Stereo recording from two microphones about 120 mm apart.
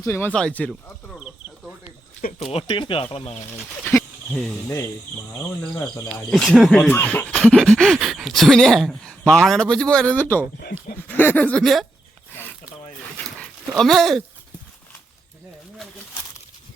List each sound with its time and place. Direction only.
0.0 s speech: 20° left (ahead or behind)
0.3 s a sound: 10° left (ahead or behind)
1.1 s snake: 10° right (ahead or behind)
2.4 s speech: 55° left (ahead or behind)
3.7 s speech: 15° left (ahead or behind)
6.0 s speech: 5° left (ahead or behind)
6.8 s speech: 15° left (ahead or behind)
10.2 s a sound: 15° left (ahead or behind)
13.1 s dog: 5° left (ahead or behind)